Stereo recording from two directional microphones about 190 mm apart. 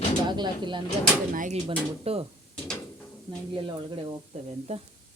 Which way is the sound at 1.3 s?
45° right (ahead or behind).